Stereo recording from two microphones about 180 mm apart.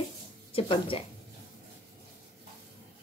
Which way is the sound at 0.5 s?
30° left (ahead or behind).